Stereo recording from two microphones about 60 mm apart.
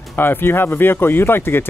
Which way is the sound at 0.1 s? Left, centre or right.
Left.